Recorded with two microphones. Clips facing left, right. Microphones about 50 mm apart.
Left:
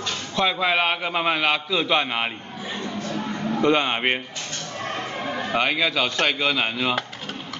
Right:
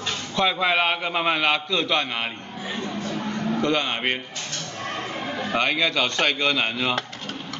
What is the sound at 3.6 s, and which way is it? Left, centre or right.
Speech, centre.